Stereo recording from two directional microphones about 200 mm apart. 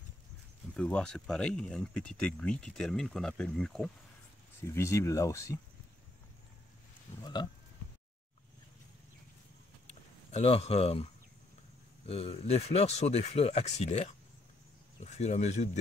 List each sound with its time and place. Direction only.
0.7 s speech: 5° left (ahead or behind)
4.6 s speech: 15° left (ahead or behind)
10.3 s speech: 30° left (ahead or behind)
12.1 s speech: 30° left (ahead or behind)